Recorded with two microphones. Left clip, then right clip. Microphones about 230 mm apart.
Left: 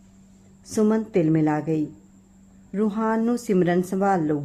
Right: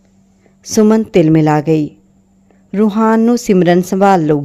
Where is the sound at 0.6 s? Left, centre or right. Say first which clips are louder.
Right 11 dB; right.